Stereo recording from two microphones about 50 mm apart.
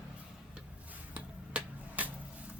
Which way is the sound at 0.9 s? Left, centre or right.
Right.